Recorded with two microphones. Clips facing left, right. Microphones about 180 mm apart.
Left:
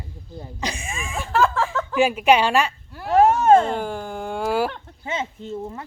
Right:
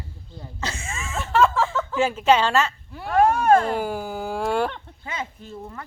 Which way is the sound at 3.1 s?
25° left (ahead or behind).